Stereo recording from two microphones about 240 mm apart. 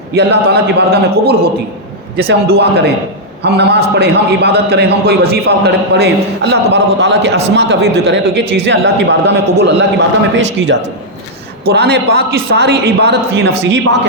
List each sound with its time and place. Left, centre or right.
0.1 s a man's voice: right